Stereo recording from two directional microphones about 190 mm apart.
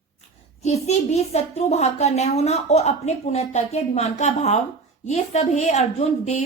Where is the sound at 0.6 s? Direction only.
35° left (ahead or behind).